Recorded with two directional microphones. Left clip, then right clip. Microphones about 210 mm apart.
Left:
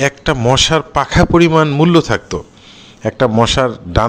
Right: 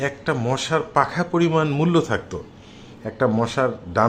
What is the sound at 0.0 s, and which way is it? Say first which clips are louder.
A man's voice: left 9 dB; 30° left (ahead or behind).